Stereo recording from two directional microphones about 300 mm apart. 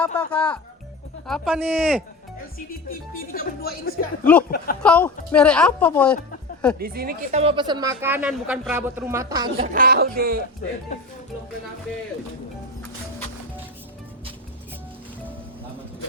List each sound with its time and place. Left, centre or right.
0.0 s speech: centre
2.6 s speech: left
4.8 s speech: centre
6.7 s speech: right; by 9.6 s centre
9.6 s speech: right